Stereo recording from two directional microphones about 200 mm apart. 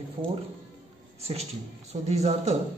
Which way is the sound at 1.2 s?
30° right (ahead or behind).